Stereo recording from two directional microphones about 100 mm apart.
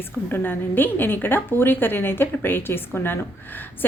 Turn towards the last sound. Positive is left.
turn(degrees=20)  # may be behind; listen again after turning